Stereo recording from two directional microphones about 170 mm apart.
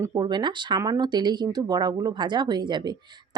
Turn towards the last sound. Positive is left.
turn(degrees=-25)  # may be behind; listen again after turning